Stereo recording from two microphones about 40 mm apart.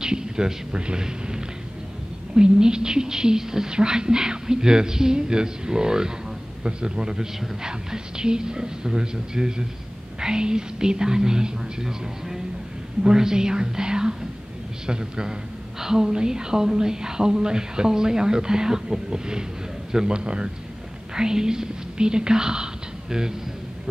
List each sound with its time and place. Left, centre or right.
0.0 s a woman's voice: centre